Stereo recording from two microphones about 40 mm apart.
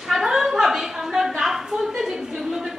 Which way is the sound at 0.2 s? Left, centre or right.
Centre.